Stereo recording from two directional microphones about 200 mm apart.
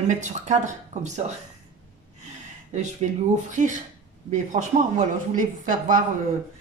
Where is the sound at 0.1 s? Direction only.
35° right (ahead or behind).